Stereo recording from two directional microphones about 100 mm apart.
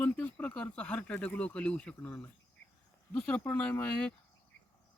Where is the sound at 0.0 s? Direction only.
15° left (ahead or behind).